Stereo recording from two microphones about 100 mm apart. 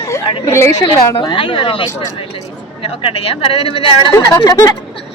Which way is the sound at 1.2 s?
55° left (ahead or behind).